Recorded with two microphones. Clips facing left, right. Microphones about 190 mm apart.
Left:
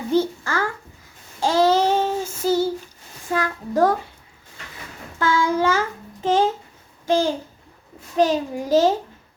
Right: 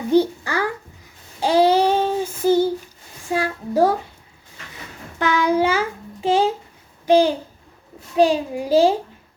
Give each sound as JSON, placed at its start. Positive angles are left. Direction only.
{"t": 0.1, "sound": "babbling", "side_deg": -15}
{"t": 1.4, "sound": "child singing", "side_deg": -15}
{"t": 3.2, "sound": "a sound", "side_deg": -10}
{"t": 5.2, "sound": "child singing", "side_deg": -15}
{"t": 7.0, "sound": "babbling", "side_deg": -15}
{"t": 8.1, "sound": "a sound", "side_deg": -10}